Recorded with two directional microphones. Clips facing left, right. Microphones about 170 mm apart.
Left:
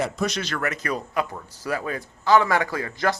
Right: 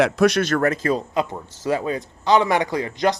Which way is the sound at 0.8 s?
25° right (ahead or behind).